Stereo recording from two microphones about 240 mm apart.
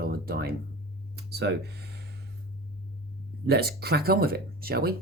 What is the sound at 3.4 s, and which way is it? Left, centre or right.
Speech, right.